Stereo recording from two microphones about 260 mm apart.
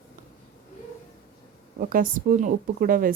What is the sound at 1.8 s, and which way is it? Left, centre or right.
Speech, right.